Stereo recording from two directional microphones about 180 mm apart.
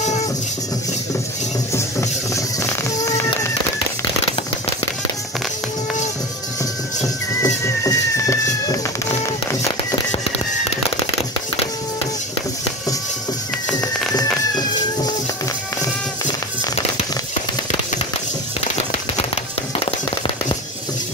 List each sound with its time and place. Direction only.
1.7 s music: 15° left (ahead or behind)
7.4 s cat: 15° left (ahead or behind)
9.2 s a sound: 15° left (ahead or behind)
13.7 s music: 5° left (ahead or behind)
14.5 s cat: 20° left (ahead or behind)